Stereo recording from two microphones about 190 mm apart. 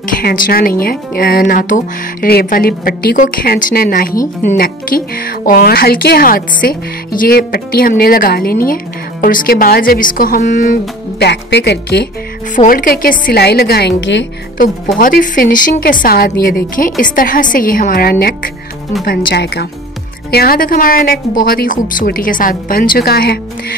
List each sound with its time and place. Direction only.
0.0 s speech: 50° left (ahead or behind)
11.1 s a woman's voice: 60° left (ahead or behind)
12.5 s a woman's voice: 50° left (ahead or behind); by 14.2 s 65° left (ahead or behind)
15.0 s speech: 45° left (ahead or behind)
19.0 s a woman's voice: 60° left (ahead or behind)